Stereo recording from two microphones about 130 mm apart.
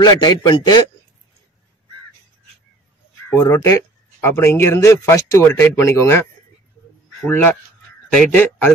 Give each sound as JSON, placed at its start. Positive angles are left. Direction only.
{"t": 0.0, "sound": "a man's voice", "side_deg": 30}
{"t": 3.3, "sound": "speech", "side_deg": 25}
{"t": 7.2, "sound": "a man's voice", "side_deg": 15}